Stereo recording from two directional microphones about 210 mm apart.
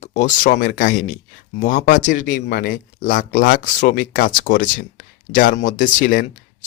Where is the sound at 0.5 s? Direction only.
45° left (ahead or behind).